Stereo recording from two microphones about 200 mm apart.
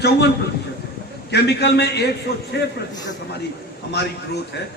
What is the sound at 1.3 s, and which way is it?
Speech, 55° left (ahead or behind).